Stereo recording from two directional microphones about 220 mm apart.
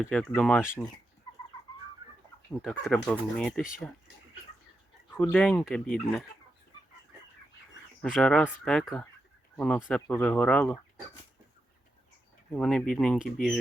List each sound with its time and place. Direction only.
0.0 s speech: 5° left (ahead or behind)
2.5 s speech: centre (ahead or behind)
5.2 s speech: centre (ahead or behind)
8.0 s speech: centre (ahead or behind)
12.5 s speech: centre (ahead or behind)